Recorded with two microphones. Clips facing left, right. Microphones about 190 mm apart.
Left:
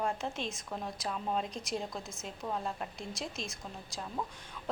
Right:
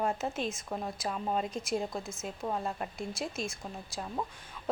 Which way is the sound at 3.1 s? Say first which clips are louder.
Right 4 dB; centre (ahead or behind).